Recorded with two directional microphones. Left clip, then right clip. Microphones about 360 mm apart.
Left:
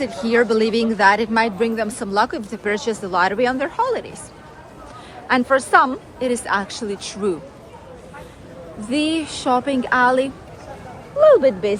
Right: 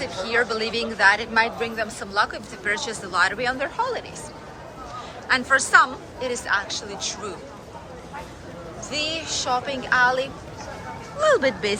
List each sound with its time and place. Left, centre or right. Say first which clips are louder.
0.0 s speech: left 5 dB; centre
5.3 s speech: left 2 dB; centre
8.9 s speech: left 5 dB; centre